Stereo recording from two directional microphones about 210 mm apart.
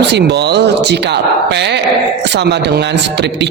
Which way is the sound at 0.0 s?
55° right (ahead or behind).